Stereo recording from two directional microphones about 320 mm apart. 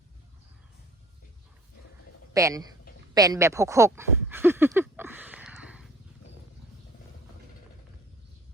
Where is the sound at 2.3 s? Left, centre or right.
Centre.